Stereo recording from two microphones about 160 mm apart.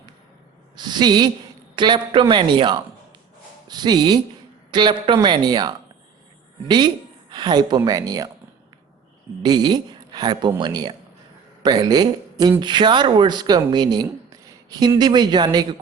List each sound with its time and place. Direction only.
0.8 s speech: 25° right (ahead or behind)
9.4 s a man's voice: 25° right (ahead or behind)